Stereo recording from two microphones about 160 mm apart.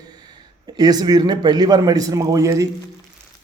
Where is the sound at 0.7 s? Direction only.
25° right (ahead or behind).